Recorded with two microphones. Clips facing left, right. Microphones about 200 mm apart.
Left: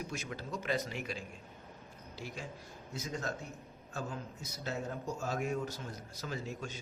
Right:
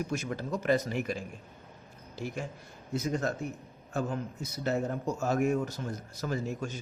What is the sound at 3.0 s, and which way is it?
Speech, 60° right (ahead or behind).